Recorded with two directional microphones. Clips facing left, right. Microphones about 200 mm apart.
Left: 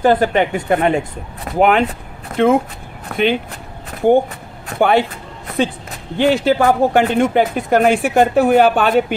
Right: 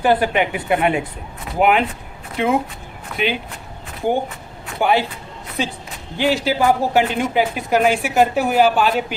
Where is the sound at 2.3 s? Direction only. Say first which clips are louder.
Left 5 dB; 50° left (ahead or behind).